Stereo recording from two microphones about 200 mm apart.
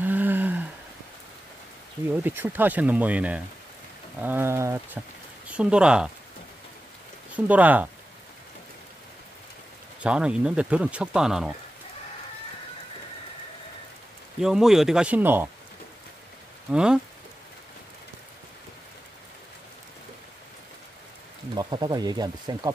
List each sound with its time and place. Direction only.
0.0 s a sound: 10° right (ahead or behind)
2.2 s speech: 10° right (ahead or behind)
7.3 s speech: 5° right (ahead or behind)
10.0 s speech: 5° right (ahead or behind)
14.4 s speech: centre (ahead or behind)
16.7 s speech: 5° right (ahead or behind)
21.5 s speech: 20° right (ahead or behind)